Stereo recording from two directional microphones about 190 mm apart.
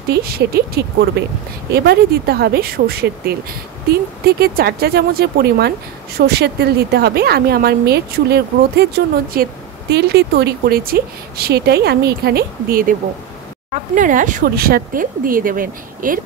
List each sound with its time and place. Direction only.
0.1 s a woman's voice: 55° right (ahead or behind)
13.9 s speech: 45° right (ahead or behind)